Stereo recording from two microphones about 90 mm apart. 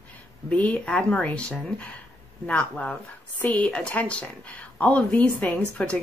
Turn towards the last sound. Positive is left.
turn(degrees=10)  # may be behind; listen again after turning